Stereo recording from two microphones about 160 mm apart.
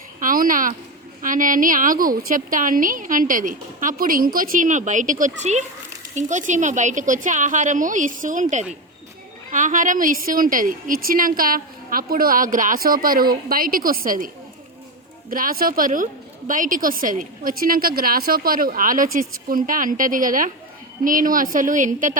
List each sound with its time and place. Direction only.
0.2 s a woman's voice: 60° right (ahead or behind)
15.3 s a woman's voice: 60° right (ahead or behind)